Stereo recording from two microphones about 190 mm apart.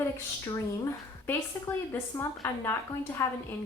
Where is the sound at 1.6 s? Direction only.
10° left (ahead or behind).